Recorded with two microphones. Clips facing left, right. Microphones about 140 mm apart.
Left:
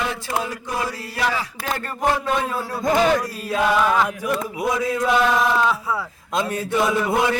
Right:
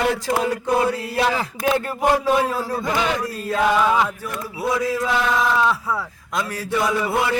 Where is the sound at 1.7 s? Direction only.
10° right (ahead or behind).